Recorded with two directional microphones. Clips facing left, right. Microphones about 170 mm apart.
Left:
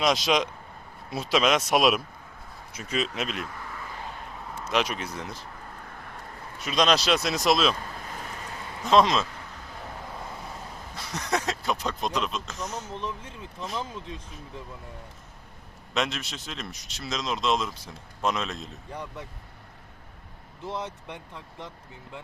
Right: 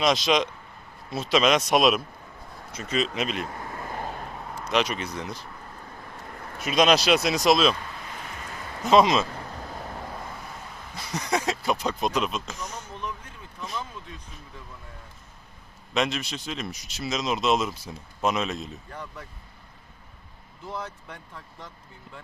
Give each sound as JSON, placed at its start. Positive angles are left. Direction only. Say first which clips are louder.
{"t": 0.0, "sound": "speech", "louder": "right 1 dB", "side_deg": 5}
{"t": 3.6, "sound": "vehicle", "louder": "right 5 dB", "side_deg": -45}
{"t": 4.6, "sound": "speech", "louder": "right 2 dB", "side_deg": 5}
{"t": 6.7, "sound": "speech", "louder": "right 3 dB", "side_deg": -5}
{"t": 7.9, "sound": "vehicle", "louder": "left 1 dB", "side_deg": 40}
{"t": 8.9, "sound": "speech", "louder": "right 2 dB", "side_deg": -5}
{"t": 10.9, "sound": "speech", "louder": "right 2 dB", "side_deg": 0}
{"t": 12.9, "sound": "speech", "louder": "left 2 dB", "side_deg": 25}
{"t": 16.0, "sound": "speech", "louder": "right 3 dB", "side_deg": 0}
{"t": 18.9, "sound": "speech", "louder": "left 2 dB", "side_deg": 20}
{"t": 20.7, "sound": "speech", "louder": "left 2 dB", "side_deg": 20}